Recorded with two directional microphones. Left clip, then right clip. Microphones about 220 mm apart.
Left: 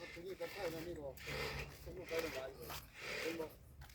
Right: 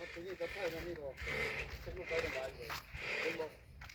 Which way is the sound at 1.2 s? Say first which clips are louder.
Right 7 dB; 30° right (ahead or behind).